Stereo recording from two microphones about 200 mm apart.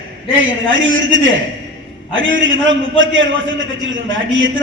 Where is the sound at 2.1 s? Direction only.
70° right (ahead or behind).